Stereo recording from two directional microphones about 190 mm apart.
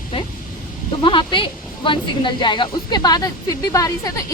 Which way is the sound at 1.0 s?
25° left (ahead or behind).